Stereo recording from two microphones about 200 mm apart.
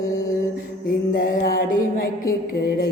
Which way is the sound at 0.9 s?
45° left (ahead or behind).